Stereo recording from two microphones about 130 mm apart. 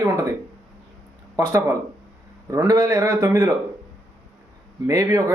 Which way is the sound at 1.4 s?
20° right (ahead or behind).